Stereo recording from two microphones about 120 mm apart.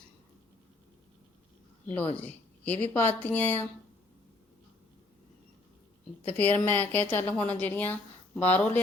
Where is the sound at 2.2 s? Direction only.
15° left (ahead or behind).